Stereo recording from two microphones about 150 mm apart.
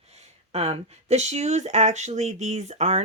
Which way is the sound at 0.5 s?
45° right (ahead or behind).